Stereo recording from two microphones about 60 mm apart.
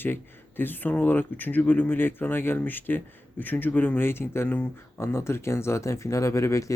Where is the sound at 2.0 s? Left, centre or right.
Left.